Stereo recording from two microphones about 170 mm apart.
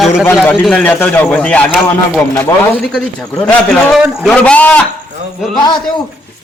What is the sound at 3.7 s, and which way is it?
A man's voice, centre (ahead or behind).